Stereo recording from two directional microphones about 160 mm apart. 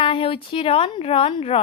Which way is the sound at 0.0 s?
35° left (ahead or behind).